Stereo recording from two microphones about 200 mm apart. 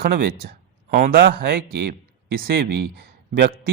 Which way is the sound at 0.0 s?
50° right (ahead or behind).